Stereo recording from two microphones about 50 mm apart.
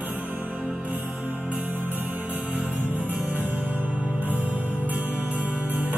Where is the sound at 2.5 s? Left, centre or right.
Right.